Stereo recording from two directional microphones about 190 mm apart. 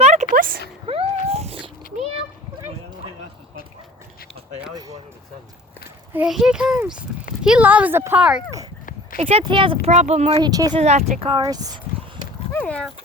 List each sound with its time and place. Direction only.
0.0 s a sound: 40° right (ahead or behind)
0.9 s cat: 30° right (ahead or behind)
4.7 s a sound: 20° right (ahead or behind)
6.1 s a child's voice: 5° right (ahead or behind)
9.1 s speech: 30° right (ahead or behind)
10.4 s speech: 20° right (ahead or behind)
10.8 s speech: 35° right (ahead or behind); by 11.7 s 20° right (ahead or behind)
12.5 s speech: 5° left (ahead or behind)